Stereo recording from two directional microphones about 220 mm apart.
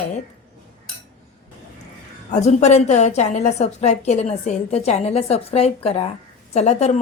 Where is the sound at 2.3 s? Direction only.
30° left (ahead or behind).